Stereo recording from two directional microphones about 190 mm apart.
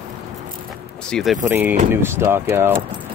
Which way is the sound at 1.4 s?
10° right (ahead or behind).